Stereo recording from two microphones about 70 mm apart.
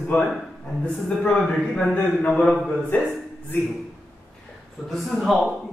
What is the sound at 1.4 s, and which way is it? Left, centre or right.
A man's voice, centre.